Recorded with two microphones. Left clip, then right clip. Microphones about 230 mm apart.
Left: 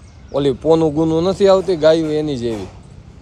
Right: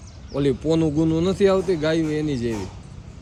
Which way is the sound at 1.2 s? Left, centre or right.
Centre.